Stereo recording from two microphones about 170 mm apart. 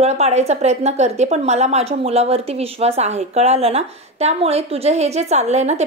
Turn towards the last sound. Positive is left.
turn(degrees=-40)  # may be behind; listen again after turning